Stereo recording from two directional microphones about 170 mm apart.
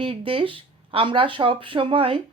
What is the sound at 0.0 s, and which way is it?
Speech, 30° right (ahead or behind).